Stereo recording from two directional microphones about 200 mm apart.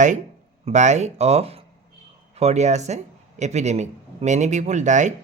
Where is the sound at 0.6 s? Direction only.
35° right (ahead or behind).